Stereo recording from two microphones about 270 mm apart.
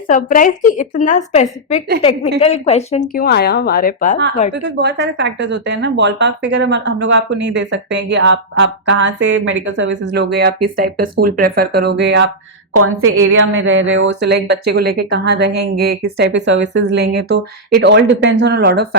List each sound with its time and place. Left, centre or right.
0.1 s a woman's voice: left
4.5 s speech: right
12.7 s speech: right